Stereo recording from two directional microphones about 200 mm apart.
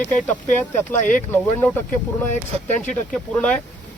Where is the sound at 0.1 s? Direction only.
10° left (ahead or behind).